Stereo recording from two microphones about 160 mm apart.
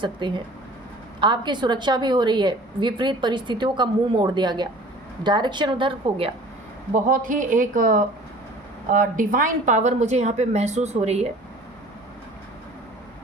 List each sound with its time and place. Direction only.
0.0 s a woman's voice: 30° right (ahead or behind)
6.9 s a woman's voice: 60° right (ahead or behind); by 11.3 s 45° right (ahead or behind)